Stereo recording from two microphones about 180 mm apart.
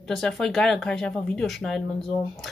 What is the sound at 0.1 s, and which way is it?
Speech, centre (ahead or behind).